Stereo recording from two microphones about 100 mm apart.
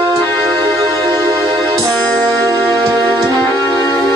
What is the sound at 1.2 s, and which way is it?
Music, 35° right (ahead or behind).